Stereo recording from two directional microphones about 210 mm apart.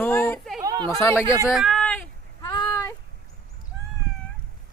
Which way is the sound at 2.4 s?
15° left (ahead or behind).